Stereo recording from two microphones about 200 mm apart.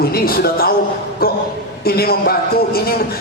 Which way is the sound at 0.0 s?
50° left (ahead or behind).